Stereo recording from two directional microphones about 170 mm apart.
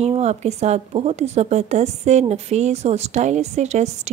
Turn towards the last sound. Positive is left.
turn(degrees=-40)  # may be behind; listen again after turning